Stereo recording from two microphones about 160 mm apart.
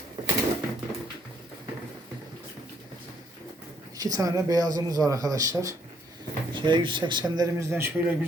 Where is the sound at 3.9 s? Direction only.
25° right (ahead or behind).